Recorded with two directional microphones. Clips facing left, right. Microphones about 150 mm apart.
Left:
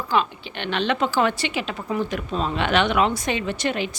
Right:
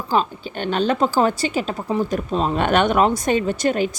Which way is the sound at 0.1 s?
40° right (ahead or behind).